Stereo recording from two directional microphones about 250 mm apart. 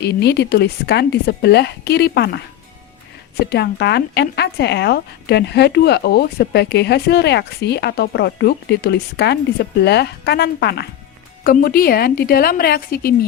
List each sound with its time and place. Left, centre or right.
0.0 s speech: left
3.4 s speech: left